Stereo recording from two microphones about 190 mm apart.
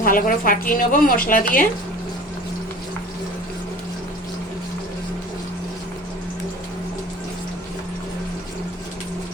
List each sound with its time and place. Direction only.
0.0 s a woman's voice: 45° left (ahead or behind)